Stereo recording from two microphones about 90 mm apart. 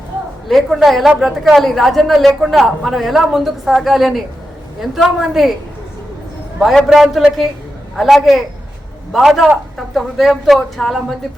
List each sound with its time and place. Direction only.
0.4 s a woman's voice: centre (ahead or behind)
6.7 s a woman's voice: centre (ahead or behind)